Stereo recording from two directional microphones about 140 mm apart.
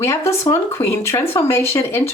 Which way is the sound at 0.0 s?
20° left (ahead or behind).